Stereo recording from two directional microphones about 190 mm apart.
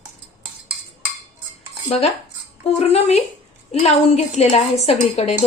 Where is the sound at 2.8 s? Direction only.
35° left (ahead or behind).